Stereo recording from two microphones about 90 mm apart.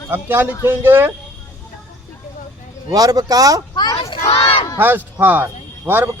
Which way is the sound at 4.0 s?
90° left.